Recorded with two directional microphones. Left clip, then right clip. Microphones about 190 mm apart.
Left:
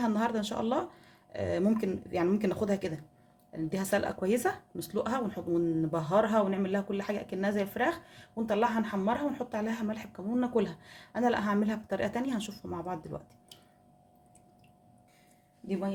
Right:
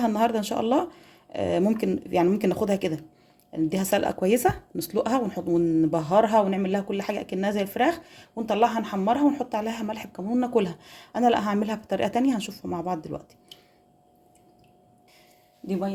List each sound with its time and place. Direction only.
0.0 s speech: 35° right (ahead or behind)
15.6 s speech: 35° right (ahead or behind)